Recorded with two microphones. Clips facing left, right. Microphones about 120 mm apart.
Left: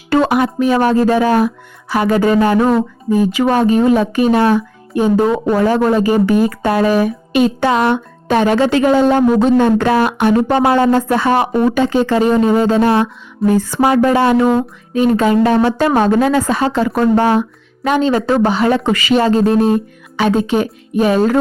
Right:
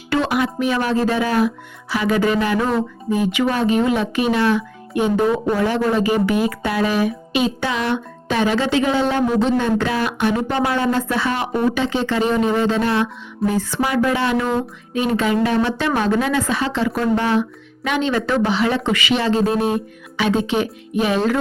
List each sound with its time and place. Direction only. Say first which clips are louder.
0.1 s speech: left 6 dB; 45° left (ahead or behind)